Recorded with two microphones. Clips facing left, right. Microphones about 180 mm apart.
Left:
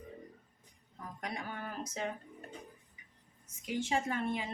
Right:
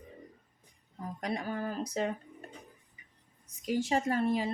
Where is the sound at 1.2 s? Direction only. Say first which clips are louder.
Right 7 dB; 35° right (ahead or behind).